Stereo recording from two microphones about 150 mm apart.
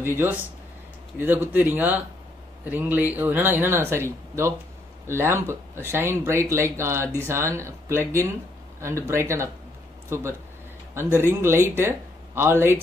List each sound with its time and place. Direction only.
0.0 s speech: 15° right (ahead or behind)